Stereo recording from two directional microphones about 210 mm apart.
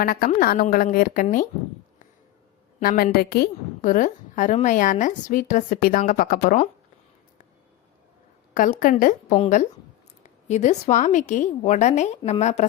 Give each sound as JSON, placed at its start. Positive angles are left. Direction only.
{"t": 0.0, "sound": "a woman's voice", "side_deg": 45}
{"t": 2.8, "sound": "a woman's voice", "side_deg": 45}
{"t": 8.5, "sound": "a woman's voice", "side_deg": 40}